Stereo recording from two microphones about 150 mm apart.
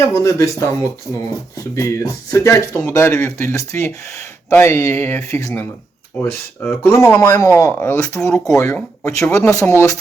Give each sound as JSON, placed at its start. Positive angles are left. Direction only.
{"t": 0.1, "sound": "speech", "side_deg": 20}
{"t": 6.8, "sound": "speech", "side_deg": 15}
{"t": 8.5, "sound": "speech", "side_deg": 20}